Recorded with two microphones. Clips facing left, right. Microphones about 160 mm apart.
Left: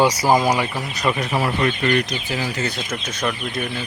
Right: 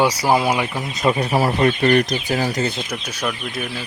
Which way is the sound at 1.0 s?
25° right (ahead or behind).